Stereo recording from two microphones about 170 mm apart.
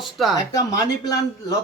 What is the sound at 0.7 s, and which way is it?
Speech, 20° left (ahead or behind).